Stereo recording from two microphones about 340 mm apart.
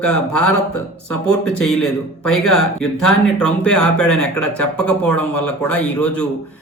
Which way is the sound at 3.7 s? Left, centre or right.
Left.